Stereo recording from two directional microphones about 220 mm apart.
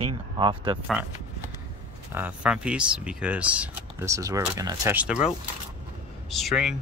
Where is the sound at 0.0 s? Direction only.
20° right (ahead or behind).